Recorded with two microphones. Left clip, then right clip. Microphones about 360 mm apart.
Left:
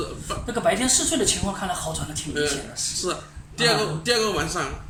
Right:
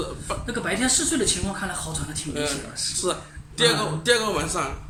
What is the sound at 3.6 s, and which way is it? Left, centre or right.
Speech, centre.